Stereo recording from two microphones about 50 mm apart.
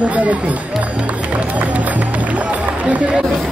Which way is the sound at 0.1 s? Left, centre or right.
Right.